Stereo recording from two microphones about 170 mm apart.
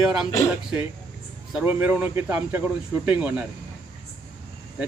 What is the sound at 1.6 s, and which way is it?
Speech, 10° right (ahead or behind).